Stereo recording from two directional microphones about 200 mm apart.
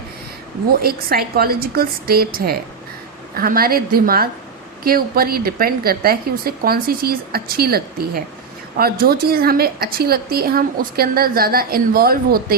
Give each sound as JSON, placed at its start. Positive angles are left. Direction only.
{"t": 0.7, "sound": "a woman's voice", "side_deg": -50}